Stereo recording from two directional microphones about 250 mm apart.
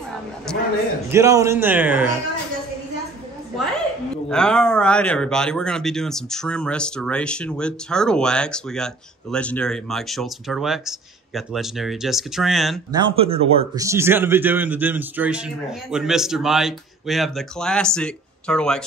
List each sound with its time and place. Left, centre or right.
0.5 s a sound: centre
1.1 s a man's voice: centre
4.3 s speech: centre
12.9 s speech: right
13.8 s speech: centre